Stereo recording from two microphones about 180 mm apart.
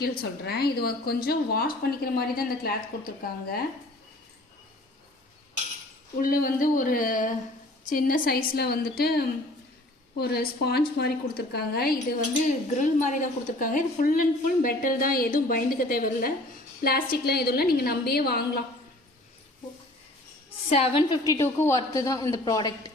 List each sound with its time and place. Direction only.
0.0 s a woman's voice: 60° left (ahead or behind)
6.1 s a woman's voice: 50° left (ahead or behind)
12.5 s a woman's voice: 45° left (ahead or behind); by 18.6 s 60° left (ahead or behind)
20.7 s a woman's voice: 35° left (ahead or behind)
21.3 s a woman's voice: 15° left (ahead or behind)